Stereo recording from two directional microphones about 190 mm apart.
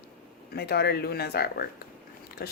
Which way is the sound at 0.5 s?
55° left (ahead or behind).